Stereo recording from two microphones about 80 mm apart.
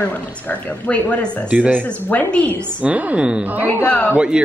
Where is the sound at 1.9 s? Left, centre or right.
Left.